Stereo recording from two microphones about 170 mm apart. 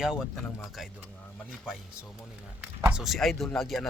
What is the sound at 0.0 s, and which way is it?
Speech, 5° right (ahead or behind).